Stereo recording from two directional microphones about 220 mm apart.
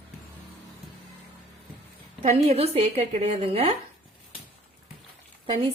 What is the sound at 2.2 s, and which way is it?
A woman's voice, 30° right (ahead or behind).